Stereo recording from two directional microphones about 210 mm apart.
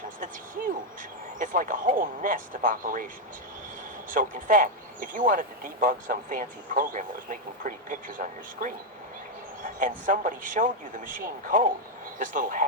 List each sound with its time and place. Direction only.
1.4 s speech: 40° right (ahead or behind)
4.1 s speech: 40° right (ahead or behind)
9.7 s speech: 40° right (ahead or behind)